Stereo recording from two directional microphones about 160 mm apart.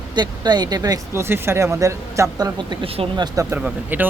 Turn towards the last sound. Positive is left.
turn(degrees=-10)  # may be behind; listen again after turning